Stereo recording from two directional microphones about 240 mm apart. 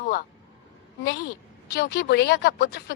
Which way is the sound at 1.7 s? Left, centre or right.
Left.